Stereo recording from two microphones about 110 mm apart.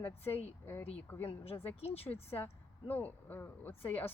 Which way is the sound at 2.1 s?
20° left (ahead or behind).